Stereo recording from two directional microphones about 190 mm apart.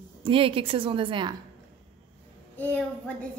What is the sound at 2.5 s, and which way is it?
Speech, 10° left (ahead or behind).